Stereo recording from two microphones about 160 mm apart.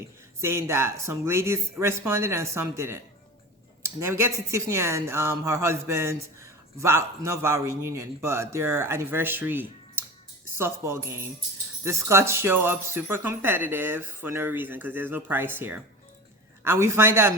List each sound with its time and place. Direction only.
0.4 s speech: 15° right (ahead or behind)